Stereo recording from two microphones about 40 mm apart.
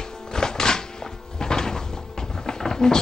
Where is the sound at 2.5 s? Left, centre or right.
Centre.